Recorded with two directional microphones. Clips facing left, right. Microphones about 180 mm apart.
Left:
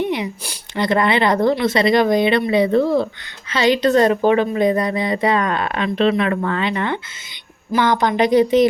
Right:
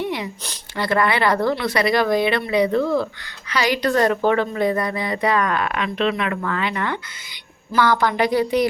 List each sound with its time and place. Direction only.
0.0 s a woman's voice: 20° left (ahead or behind)